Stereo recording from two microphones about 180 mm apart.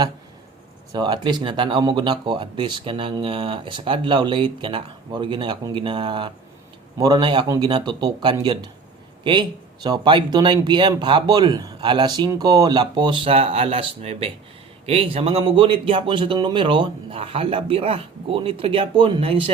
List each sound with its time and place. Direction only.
0.9 s speech: 25° right (ahead or behind)